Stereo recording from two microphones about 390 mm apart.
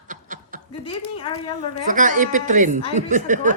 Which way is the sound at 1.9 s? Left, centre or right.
Centre.